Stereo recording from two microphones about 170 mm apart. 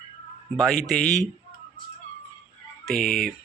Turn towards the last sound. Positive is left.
turn(degrees=5)  # may be behind; listen again after turning